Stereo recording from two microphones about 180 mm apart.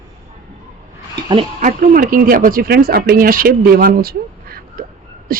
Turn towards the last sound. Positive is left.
turn(degrees=-55)  # may be behind; listen again after turning